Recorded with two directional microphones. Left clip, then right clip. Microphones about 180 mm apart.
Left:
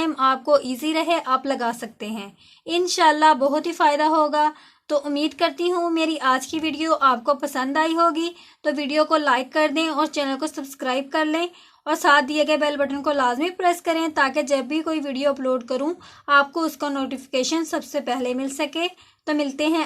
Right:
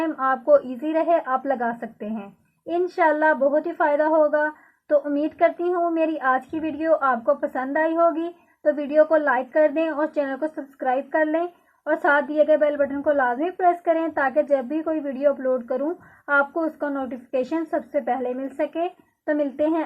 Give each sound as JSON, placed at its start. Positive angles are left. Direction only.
{"t": 0.0, "sound": "a woman's voice", "side_deg": 30}